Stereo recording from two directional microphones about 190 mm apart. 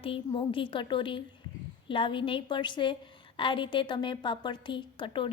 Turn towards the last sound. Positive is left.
turn(degrees=25)  # may be behind; listen again after turning